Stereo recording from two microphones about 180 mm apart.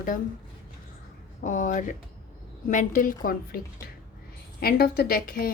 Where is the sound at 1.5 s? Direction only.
45° left (ahead or behind).